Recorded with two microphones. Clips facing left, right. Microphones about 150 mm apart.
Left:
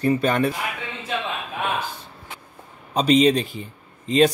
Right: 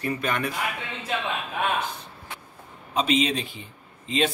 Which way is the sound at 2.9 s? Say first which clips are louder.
Left 7 dB; 40° left (ahead or behind).